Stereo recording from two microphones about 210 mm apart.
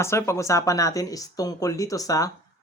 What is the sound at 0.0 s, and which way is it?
Speech, 15° left (ahead or behind).